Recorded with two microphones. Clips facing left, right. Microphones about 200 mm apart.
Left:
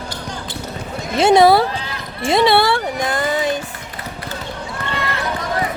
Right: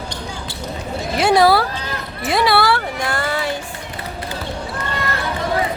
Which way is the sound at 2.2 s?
25° left (ahead or behind).